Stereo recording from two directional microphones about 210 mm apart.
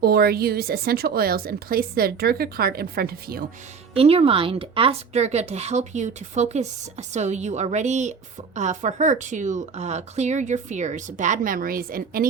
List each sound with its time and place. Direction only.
0.0 s speech: 45° right (ahead or behind)
3.9 s a woman's voice: 30° right (ahead or behind)